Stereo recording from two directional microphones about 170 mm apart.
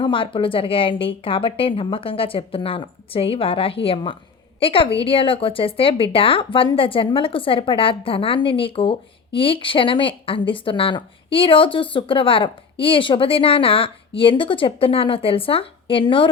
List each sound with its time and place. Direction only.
0.0 s a woman's voice: 30° left (ahead or behind)